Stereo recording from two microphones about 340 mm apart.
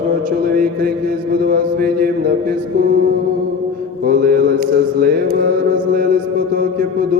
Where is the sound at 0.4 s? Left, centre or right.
Right.